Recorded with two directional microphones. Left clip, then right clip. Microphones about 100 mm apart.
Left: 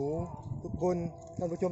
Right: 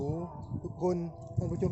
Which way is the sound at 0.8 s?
35° right (ahead or behind).